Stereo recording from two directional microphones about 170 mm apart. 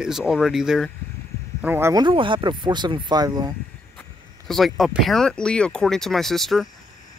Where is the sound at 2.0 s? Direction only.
30° right (ahead or behind).